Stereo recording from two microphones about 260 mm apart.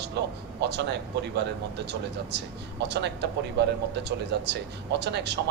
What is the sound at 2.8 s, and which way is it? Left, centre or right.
Speech, right.